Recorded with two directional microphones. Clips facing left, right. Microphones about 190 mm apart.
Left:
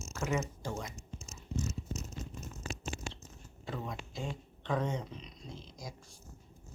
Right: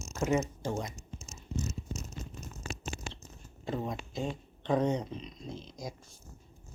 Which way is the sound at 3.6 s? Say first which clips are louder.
Right 5 dB; 25° right (ahead or behind).